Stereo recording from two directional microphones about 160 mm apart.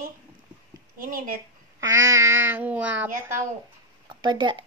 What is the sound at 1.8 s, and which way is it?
Speech, 20° right (ahead or behind).